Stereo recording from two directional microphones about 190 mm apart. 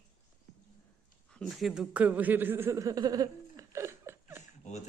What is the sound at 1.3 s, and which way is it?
A man's voice, centre (ahead or behind).